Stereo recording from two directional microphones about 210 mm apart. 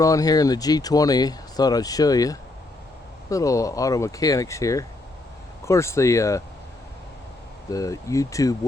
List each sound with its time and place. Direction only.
0.0 s speech: 15° left (ahead or behind)
7.7 s speech: 15° left (ahead or behind)